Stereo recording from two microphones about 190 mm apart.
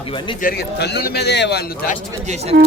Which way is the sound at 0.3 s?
50° left (ahead or behind).